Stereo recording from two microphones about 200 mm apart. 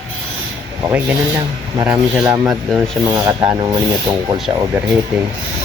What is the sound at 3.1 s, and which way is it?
Rub, 15° right (ahead or behind).